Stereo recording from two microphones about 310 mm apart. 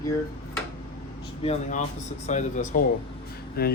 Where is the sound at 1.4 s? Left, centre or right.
Left.